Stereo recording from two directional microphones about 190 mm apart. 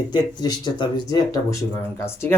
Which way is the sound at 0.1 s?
20° left (ahead or behind).